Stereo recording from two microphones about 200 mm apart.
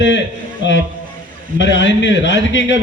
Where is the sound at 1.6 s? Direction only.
65° left (ahead or behind).